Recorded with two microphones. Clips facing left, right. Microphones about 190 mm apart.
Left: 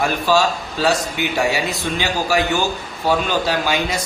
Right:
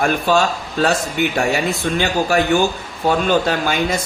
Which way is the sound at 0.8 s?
55° right (ahead or behind).